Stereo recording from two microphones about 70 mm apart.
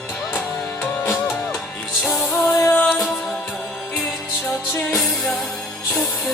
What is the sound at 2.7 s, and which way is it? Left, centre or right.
Music, left.